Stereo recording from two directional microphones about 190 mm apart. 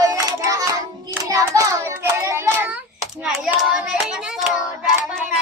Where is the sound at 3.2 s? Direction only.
Centre (ahead or behind).